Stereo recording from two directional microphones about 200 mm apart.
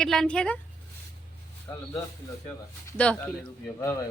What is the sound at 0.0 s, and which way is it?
Speech, 5° left (ahead or behind).